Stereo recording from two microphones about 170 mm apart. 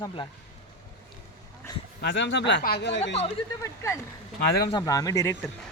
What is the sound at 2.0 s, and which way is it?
Speech, 90° left.